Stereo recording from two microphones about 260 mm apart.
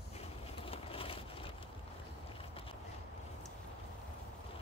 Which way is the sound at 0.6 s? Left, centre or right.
Left.